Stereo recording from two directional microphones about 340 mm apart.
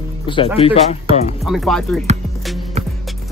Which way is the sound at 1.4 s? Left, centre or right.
Centre.